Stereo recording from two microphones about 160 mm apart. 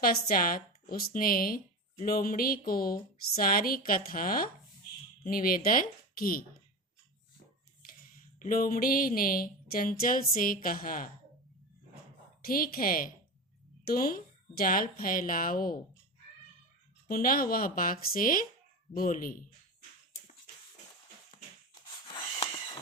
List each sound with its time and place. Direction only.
0.0 s speech: 65° left (ahead or behind)
8.4 s speech: 55° left (ahead or behind)
12.4 s speech: 65° left (ahead or behind)
17.1 s speech: 65° left (ahead or behind)
21.8 s wheeze: 30° left (ahead or behind)